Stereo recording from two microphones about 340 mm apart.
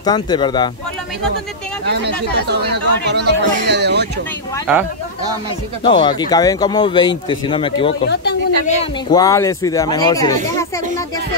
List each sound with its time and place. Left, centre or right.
0.0 s speech: centre
2.4 s speech: right
5.9 s speech: centre
8.1 s speech: left; by 10.7 s centre